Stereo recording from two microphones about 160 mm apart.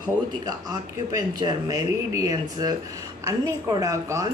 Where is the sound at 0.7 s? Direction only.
25° right (ahead or behind).